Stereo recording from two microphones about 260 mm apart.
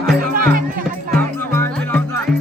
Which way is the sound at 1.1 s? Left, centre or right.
Centre.